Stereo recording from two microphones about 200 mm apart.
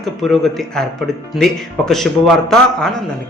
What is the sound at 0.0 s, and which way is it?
Speech, centre (ahead or behind).